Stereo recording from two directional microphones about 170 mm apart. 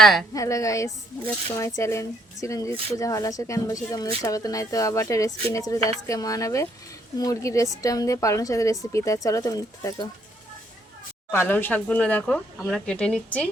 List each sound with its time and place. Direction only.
0.0 s a woman's voice: centre (ahead or behind)
0.3 s speech: 20° left (ahead or behind)
11.3 s speech: 15° left (ahead or behind)